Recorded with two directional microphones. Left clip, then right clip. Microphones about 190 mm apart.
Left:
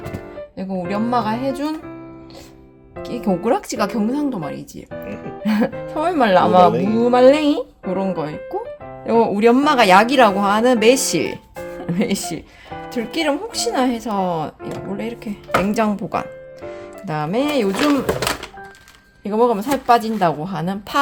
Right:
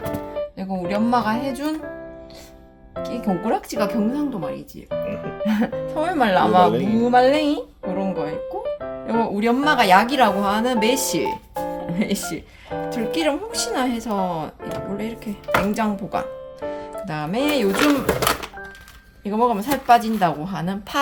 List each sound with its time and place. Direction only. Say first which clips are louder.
0.5 s speech: left 5 dB; 40° left (ahead or behind)
3.0 s speech: left 3 dB; 50° left (ahead or behind)
17.7 s speech: left 1 dB; 5° left (ahead or behind)
19.2 s speech: left 3 dB; 40° left (ahead or behind)